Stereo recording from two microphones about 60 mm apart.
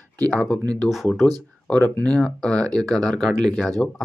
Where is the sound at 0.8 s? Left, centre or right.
Centre.